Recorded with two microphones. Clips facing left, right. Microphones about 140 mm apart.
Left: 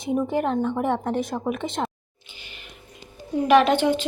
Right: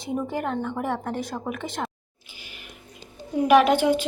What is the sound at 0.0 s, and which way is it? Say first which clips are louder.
Speech: left 4 dB; 20° left (ahead or behind).